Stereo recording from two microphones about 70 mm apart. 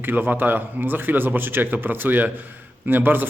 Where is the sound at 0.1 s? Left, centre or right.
Right.